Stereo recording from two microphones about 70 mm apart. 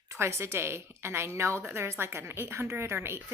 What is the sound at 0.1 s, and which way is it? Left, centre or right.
A woman's voice, right.